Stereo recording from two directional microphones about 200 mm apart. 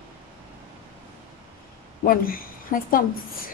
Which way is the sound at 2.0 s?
45° left (ahead or behind).